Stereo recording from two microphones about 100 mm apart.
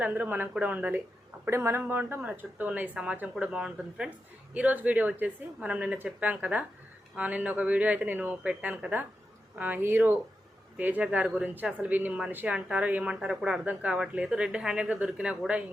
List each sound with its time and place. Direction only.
0.0 s a woman's voice: 15° right (ahead or behind)